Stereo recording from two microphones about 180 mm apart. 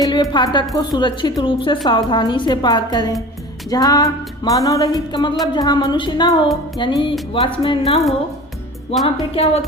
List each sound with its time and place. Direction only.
0.0 s a woman's voice: 25° left (ahead or behind)
9.3 s speech: 35° left (ahead or behind)